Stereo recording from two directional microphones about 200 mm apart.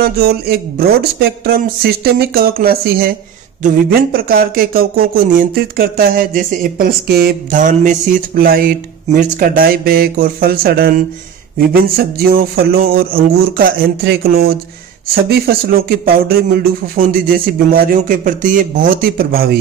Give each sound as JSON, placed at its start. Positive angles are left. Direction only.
{"t": 0.0, "sound": "speech", "side_deg": -50}